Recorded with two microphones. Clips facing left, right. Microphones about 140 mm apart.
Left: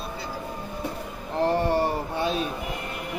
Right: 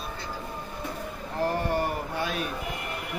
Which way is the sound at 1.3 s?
30° left (ahead or behind).